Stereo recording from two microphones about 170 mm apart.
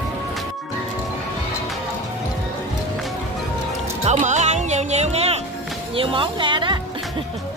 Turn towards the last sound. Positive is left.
turn(degrees=-30)  # may be behind; listen again after turning